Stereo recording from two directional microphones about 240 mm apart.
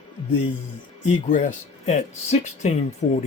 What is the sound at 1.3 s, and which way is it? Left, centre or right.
Speech, left.